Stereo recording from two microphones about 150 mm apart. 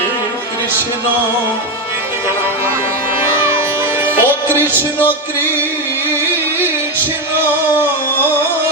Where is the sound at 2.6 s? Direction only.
15° right (ahead or behind).